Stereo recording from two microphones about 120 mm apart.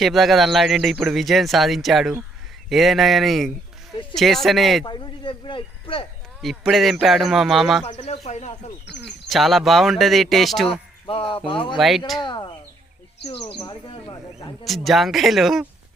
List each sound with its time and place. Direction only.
0.0 s speech: centre (ahead or behind)
4.9 s speech: 40° left (ahead or behind)
6.4 s speech: centre (ahead or behind)
7.9 s speech: 70° left (ahead or behind)
9.0 s speech: centre (ahead or behind)
11.1 s speech: 50° left (ahead or behind)
11.8 s speech: centre (ahead or behind)
12.2 s speech: 40° left (ahead or behind)
13.6 s speech: 40° left (ahead or behind)
14.6 s speech: centre (ahead or behind)